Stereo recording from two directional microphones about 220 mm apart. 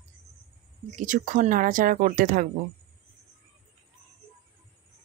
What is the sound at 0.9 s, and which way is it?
Speech, 35° right (ahead or behind).